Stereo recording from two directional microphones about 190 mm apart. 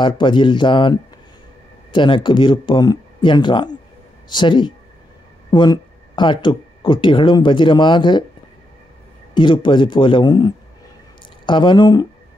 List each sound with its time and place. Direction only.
0.0 s speech: 25° left (ahead or behind)
9.3 s speech: 25° left (ahead or behind)